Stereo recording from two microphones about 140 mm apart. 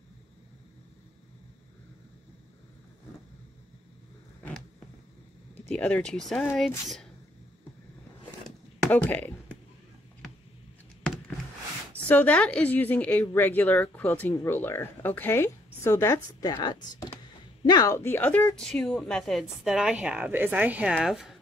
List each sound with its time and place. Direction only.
5.7 s a woman's voice: 10° left (ahead or behind)
8.5 s a sound: 5° left (ahead or behind)
12.1 s a woman's voice: 10° left (ahead or behind)